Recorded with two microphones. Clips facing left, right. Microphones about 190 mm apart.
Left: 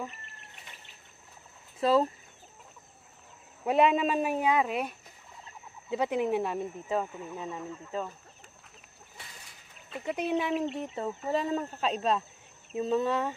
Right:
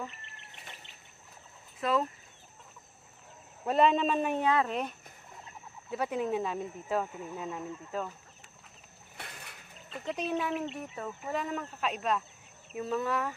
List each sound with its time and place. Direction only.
1.8 s speech: 30° left (ahead or behind)
3.6 s speech: 10° left (ahead or behind)
6.9 s speech: centre (ahead or behind)
9.1 s a sound: 60° right (ahead or behind)
9.8 s speech: 10° left (ahead or behind)
10.6 s speech: 25° left (ahead or behind)